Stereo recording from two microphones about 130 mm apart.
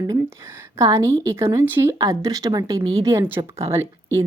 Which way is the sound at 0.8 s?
25° right (ahead or behind).